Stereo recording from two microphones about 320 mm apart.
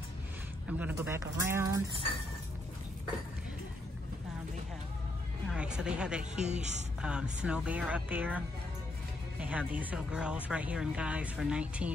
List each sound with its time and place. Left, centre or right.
0.7 s speech: centre
5.5 s music: centre
6.3 s speech: right
7.0 s speech: centre